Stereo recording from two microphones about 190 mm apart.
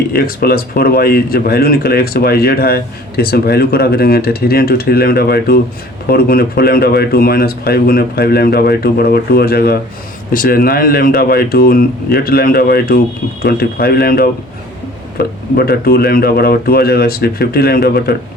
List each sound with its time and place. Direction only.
0.1 s speech: 50° left (ahead or behind)